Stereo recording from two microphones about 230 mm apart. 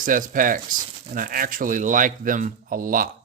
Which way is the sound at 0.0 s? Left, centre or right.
Right.